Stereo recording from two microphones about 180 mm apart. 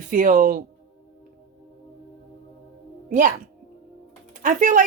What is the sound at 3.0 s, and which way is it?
Speech, 45° right (ahead or behind).